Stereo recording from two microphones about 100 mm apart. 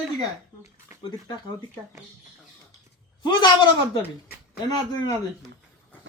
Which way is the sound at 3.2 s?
50° left (ahead or behind).